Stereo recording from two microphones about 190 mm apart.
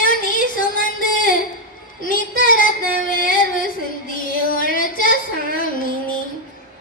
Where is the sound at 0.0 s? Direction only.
45° left (ahead or behind).